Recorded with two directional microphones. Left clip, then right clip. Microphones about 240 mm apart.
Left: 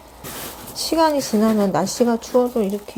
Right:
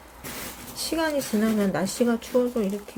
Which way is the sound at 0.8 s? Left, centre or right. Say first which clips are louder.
Left 8 dB; centre.